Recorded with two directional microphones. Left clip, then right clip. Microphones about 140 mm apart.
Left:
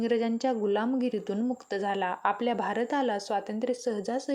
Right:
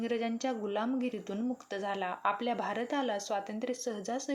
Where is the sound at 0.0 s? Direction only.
40° left (ahead or behind).